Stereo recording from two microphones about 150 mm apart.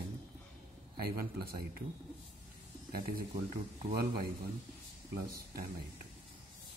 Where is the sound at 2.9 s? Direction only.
80° right.